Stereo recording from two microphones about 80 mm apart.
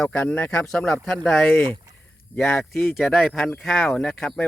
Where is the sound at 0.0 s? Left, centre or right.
Centre.